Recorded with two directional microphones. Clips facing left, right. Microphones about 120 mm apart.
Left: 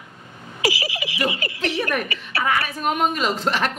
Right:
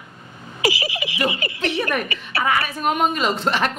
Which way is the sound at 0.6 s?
25° right (ahead or behind).